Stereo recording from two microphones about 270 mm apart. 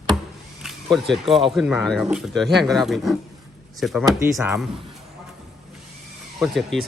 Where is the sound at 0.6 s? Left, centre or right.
Centre.